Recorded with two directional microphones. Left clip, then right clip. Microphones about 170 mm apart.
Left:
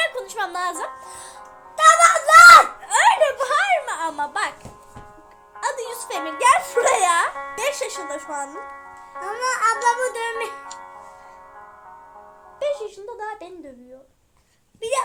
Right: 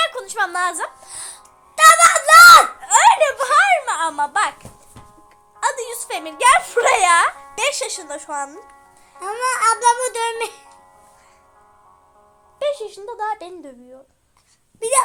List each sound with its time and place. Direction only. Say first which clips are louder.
0.0 s a woman's voice: right 4 dB; 5° left (ahead or behind)
1.7 s music: right 3 dB; 20° right (ahead or behind)
2.8 s laughter: right 4 dB; centre (ahead or behind)
3.4 s a sound: right 5 dB; centre (ahead or behind)
5.5 s speech: right 4 dB; centre (ahead or behind)
9.2 s a child's voice: right 3 dB; 20° right (ahead or behind)
12.5 s speech: right 2 dB; 5° right (ahead or behind)
14.8 s speech: right 5 dB; 20° right (ahead or behind)